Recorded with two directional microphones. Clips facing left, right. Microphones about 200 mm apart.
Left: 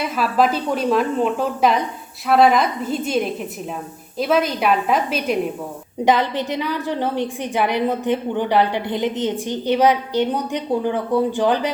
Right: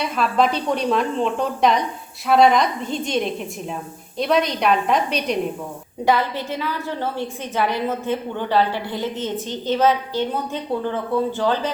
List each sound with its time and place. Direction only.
0.0 s a woman's voice: 5° left (ahead or behind)
6.1 s a woman's voice: 20° left (ahead or behind)